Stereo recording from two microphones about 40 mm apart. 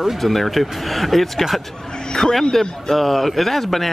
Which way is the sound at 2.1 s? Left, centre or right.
Centre.